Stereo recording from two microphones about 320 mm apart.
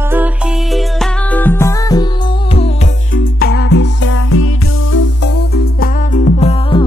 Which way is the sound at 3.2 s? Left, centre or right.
Left.